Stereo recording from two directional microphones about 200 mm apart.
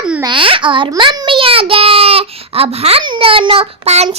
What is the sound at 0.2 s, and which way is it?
A child's voice, 25° right (ahead or behind).